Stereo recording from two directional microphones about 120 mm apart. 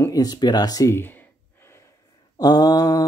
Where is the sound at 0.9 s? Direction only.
15° left (ahead or behind).